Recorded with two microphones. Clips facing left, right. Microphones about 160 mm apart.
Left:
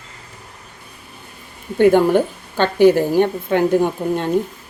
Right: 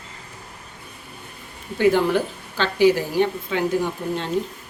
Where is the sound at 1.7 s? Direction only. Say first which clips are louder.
Left 6 dB; 50° left (ahead or behind).